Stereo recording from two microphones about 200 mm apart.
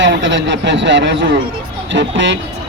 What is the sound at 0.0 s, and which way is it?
A man's voice, 65° right (ahead or behind).